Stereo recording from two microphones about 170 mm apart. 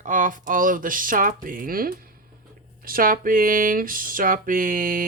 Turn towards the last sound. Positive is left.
turn(degrees=-55)  # may be behind; listen again after turning